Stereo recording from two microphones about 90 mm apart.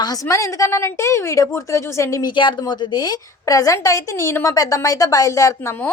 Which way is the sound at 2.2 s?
60° left (ahead or behind).